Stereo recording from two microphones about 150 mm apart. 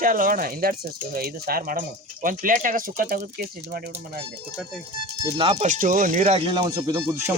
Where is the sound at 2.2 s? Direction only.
65° right (ahead or behind); by 4.2 s 90° right.